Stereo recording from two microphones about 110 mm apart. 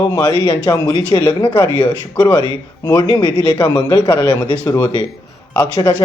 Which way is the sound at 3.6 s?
40° left (ahead or behind).